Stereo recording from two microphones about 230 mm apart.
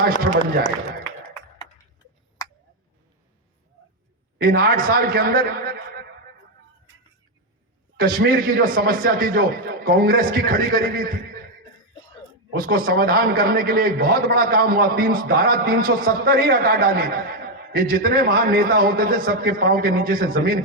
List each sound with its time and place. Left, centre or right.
0.0 s a man's voice: right
2.4 s tick: centre
4.4 s a man's voice: right
7.9 s a man's voice: right
12.5 s a man's voice: right